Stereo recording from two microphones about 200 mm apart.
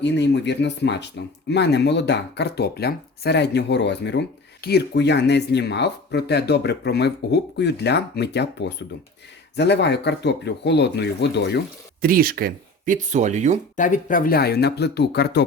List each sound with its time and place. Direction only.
0.0 s speech: 60° left (ahead or behind)
12.0 s speech: 45° right (ahead or behind)
13.7 s speech: 40° left (ahead or behind); by 15.4 s 55° left (ahead or behind)